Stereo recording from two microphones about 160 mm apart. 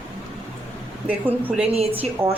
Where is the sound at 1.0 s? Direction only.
10° right (ahead or behind).